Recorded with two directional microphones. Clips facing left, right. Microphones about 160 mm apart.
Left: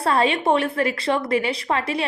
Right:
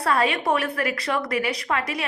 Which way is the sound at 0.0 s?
25° left (ahead or behind).